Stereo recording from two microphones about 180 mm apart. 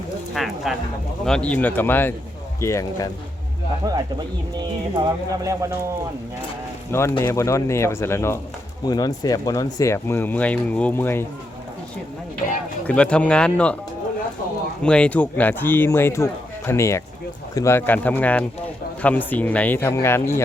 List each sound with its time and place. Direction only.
0.3 s speech: centre (ahead or behind); by 3.1 s 15° left (ahead or behind)
3.8 s speech: 20° right (ahead or behind)
7.2 s speech: 15° left (ahead or behind)
12.9 s speech: 5° left (ahead or behind)
14.8 s speech: 5° left (ahead or behind)